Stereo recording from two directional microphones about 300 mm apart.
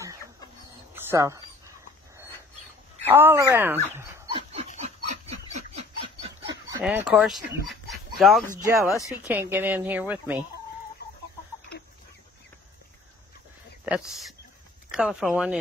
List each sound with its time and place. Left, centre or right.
0.9 s a sound: centre
3.1 s speech: centre
3.9 s dog: centre
6.2 s a sound: centre
6.8 s speech: centre
11.7 s chicken: left
13.8 s speech: centre